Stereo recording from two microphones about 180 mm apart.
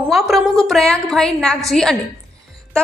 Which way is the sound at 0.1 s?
Centre (ahead or behind).